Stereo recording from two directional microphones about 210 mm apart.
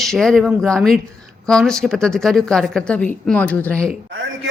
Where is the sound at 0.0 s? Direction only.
Centre (ahead or behind).